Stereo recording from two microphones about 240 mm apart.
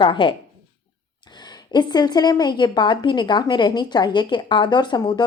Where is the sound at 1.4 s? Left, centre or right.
Centre.